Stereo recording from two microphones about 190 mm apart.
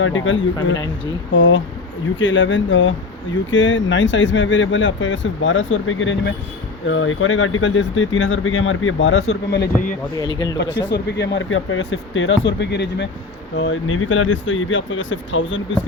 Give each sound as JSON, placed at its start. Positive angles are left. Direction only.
{"t": 0.0, "sound": "speech", "side_deg": 90}
{"t": 12.5, "sound": "speech", "side_deg": 65}
{"t": 13.6, "sound": "speech", "side_deg": 85}